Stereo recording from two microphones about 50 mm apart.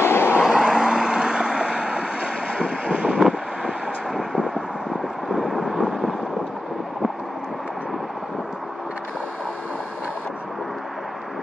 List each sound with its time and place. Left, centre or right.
0.0 s vehicle: left
0.4 s vehicle: centre